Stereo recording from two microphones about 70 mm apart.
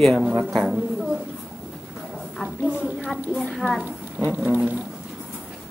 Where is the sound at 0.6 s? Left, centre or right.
Centre.